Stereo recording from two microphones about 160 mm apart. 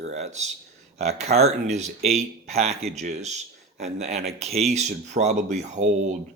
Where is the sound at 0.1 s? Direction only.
45° right (ahead or behind).